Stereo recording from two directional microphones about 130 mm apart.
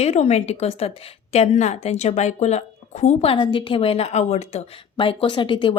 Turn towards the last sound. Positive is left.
turn(degrees=40)  # may be behind; listen again after turning